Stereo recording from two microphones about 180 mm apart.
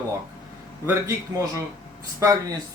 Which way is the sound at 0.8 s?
15° right (ahead or behind).